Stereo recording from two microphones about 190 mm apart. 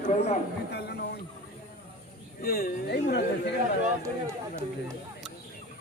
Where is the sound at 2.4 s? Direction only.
50° left (ahead or behind).